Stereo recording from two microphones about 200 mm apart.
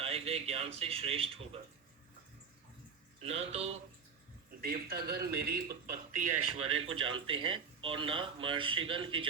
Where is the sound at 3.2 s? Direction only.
30° right (ahead or behind).